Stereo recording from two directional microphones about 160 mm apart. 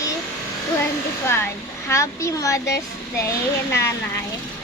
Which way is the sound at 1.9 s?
20° left (ahead or behind).